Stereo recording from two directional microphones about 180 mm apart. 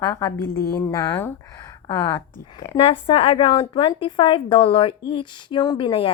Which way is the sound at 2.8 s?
30° left (ahead or behind).